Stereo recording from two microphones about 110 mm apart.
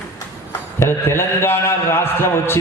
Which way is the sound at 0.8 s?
25° left (ahead or behind).